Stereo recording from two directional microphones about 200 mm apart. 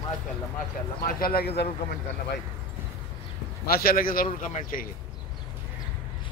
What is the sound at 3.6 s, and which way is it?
A man's voice, 50° left (ahead or behind).